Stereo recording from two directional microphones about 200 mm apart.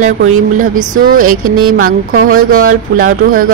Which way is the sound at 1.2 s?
90° right.